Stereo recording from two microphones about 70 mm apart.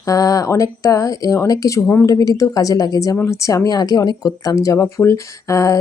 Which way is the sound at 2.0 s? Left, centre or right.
Left.